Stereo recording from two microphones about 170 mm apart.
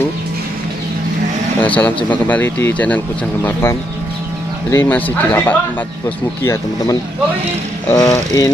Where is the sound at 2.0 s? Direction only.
10° left (ahead or behind).